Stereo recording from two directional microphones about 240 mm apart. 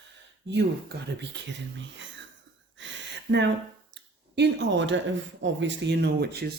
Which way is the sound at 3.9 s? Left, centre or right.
Right.